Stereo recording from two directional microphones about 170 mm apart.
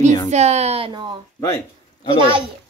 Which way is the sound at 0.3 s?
40° right (ahead or behind).